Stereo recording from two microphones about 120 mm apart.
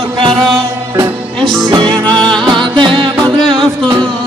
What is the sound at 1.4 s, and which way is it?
Music, 5° left (ahead or behind).